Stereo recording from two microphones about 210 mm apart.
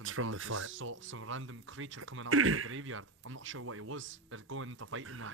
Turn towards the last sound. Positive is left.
turn(degrees=-75)  # may be behind; listen again after turning